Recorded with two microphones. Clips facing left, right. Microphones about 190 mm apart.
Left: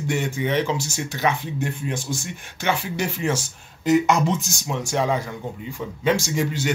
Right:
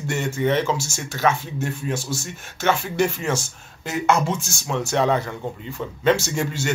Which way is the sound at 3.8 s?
15° left (ahead or behind).